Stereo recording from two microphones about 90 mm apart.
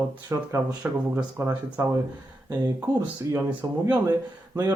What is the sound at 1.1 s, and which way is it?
Speech, 25° right (ahead or behind).